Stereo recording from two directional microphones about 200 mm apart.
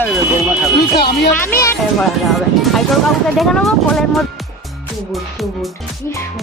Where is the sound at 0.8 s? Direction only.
55° left (ahead or behind).